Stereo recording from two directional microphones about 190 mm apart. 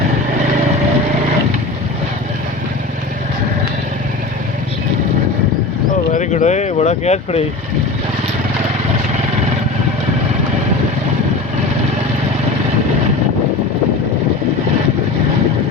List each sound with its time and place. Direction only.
6.1 s speech: 40° left (ahead or behind)